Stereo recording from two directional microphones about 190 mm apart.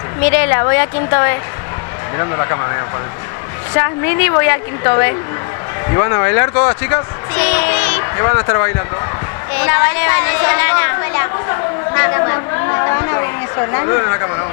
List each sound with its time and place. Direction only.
0.2 s a woman's voice: 15° left (ahead or behind)